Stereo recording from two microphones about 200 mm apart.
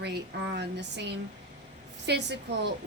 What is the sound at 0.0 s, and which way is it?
A woman's voice, 55° right (ahead or behind).